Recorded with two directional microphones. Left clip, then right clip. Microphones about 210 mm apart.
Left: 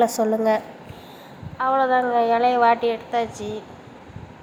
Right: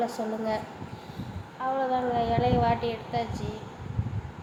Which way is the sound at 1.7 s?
25° left (ahead or behind).